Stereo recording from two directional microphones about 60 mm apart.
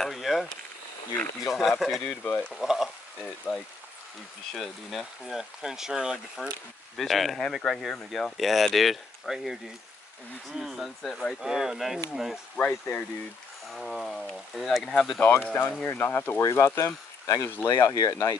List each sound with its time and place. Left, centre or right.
0.0 s speech: centre
1.5 s speech: centre
2.2 s speech: left
2.5 s speech: centre
6.4 s speech: centre
10.6 s speech: centre
11.4 s speech: centre
12.5 s speech: left
13.7 s speech: centre
15.1 s speech: left
16.3 s speech: left
16.8 s speech: left
17.7 s speech: left